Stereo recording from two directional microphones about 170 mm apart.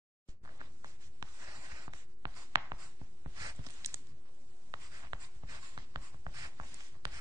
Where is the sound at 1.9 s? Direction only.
20° right (ahead or behind).